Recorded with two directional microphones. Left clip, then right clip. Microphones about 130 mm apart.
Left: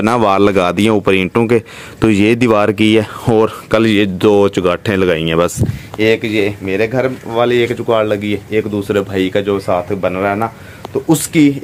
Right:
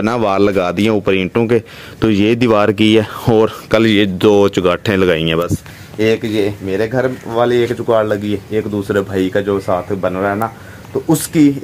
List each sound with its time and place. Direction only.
0.0 s speech: 15° left (ahead or behind)
11.1 s speech: centre (ahead or behind)